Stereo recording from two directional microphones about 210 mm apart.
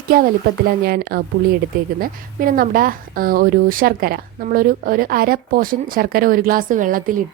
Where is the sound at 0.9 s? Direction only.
45° right (ahead or behind).